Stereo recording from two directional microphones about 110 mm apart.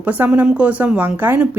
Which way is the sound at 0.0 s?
15° right (ahead or behind).